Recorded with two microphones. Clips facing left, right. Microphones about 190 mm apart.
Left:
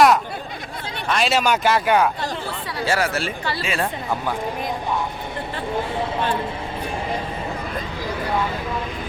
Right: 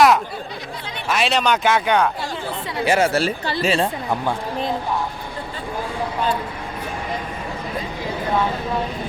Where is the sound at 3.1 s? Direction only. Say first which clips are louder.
Right 5 dB; 35° right (ahead or behind).